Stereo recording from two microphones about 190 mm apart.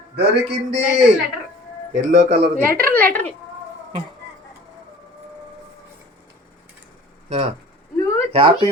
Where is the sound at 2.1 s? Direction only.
35° right (ahead or behind).